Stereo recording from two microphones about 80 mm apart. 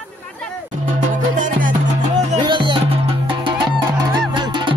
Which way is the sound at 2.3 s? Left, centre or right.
Right.